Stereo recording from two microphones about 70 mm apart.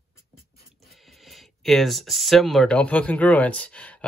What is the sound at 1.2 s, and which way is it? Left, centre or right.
Speech, centre.